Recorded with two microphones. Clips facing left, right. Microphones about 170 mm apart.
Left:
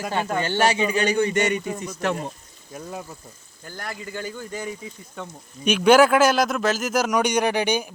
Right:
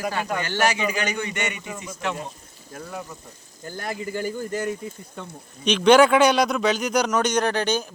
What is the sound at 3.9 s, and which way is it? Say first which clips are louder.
Speech: right 5 dB; 10° right (ahead or behind).